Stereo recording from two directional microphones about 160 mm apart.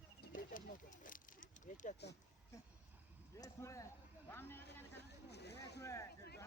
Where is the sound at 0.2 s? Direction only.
55° left (ahead or behind).